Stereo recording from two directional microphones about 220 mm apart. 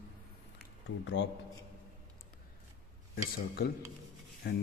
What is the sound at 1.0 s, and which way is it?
Speech, 55° left (ahead or behind).